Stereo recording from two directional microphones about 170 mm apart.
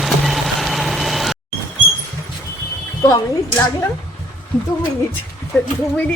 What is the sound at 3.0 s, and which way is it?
Speech, 20° left (ahead or behind).